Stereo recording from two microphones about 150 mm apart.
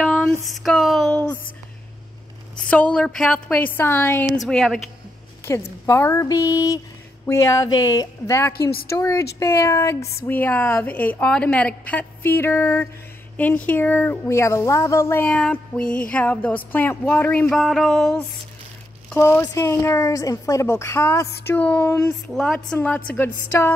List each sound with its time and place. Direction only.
0.0 s a sound: 5° left (ahead or behind)
2.6 s speech: 10° left (ahead or behind)
4.5 s a woman's voice: 5° left (ahead or behind)
5.4 s a woman's voice: 20° left (ahead or behind); by 18.2 s 5° left (ahead or behind)
19.1 s a woman's voice: 15° left (ahead or behind)
22.3 s a woman's voice: 5° left (ahead or behind)